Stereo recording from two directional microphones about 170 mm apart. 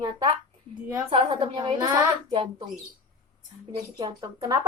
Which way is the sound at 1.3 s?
30° right (ahead or behind).